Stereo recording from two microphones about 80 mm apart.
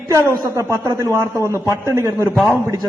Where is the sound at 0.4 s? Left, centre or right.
Right.